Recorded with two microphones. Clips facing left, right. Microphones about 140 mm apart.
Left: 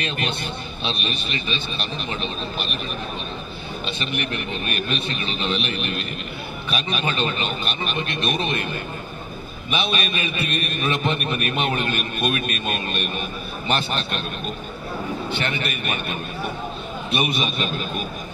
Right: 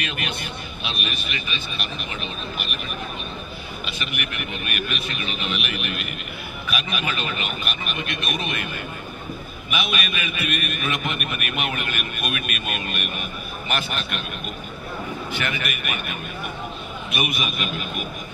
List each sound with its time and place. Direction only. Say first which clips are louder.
0.0 s a man's voice: left 3 dB; 30° left (ahead or behind)
3.8 s a man's voice: left 5 dB; 30° left (ahead or behind)
9.7 s a man's voice: left 3 dB; 30° left (ahead or behind)
15.3 s a man's voice: left 2 dB; 30° left (ahead or behind)